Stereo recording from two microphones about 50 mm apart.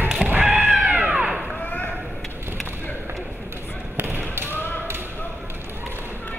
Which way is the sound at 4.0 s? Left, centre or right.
Right.